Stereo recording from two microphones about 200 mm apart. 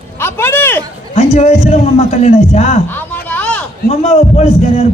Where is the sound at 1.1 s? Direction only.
30° left (ahead or behind).